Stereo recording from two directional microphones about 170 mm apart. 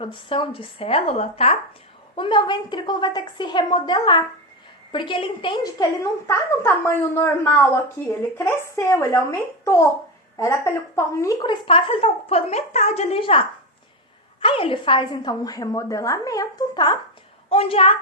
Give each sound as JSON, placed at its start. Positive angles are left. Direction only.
{"t": 0.0, "sound": "a woman's voice", "side_deg": 30}
{"t": 10.3, "sound": "a woman's voice", "side_deg": 15}
{"t": 14.4, "sound": "a woman's voice", "side_deg": 30}